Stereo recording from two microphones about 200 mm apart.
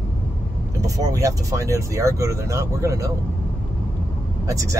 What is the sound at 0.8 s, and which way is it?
Speech, 15° right (ahead or behind).